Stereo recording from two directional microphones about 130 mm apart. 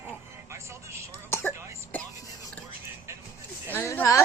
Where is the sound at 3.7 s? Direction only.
15° left (ahead or behind).